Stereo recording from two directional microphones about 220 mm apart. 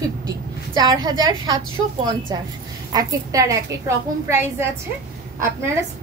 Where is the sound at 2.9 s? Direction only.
15° right (ahead or behind).